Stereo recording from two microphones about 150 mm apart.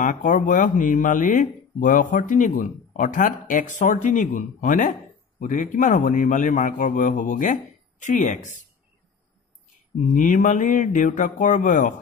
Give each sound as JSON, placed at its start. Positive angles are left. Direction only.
{"t": 0.0, "sound": "speech", "side_deg": 60}
{"t": 10.1, "sound": "speech", "side_deg": 60}